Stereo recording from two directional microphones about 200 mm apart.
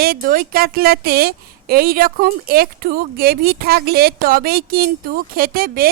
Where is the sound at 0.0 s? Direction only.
45° right (ahead or behind).